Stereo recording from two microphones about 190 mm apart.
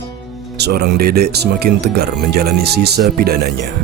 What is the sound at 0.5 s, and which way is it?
Speech, 60° right (ahead or behind).